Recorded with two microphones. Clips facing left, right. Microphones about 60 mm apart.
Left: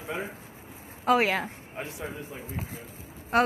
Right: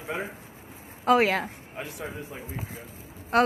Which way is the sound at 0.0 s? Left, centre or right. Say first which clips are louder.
Right 1 dB; centre.